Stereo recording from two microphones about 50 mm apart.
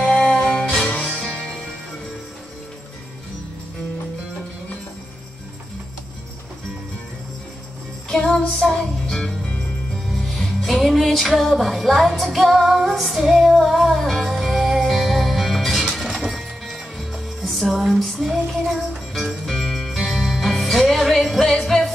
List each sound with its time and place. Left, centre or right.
0.0 s music: centre
1.2 s music: centre
8.1 s music: centre
10.1 s music: centre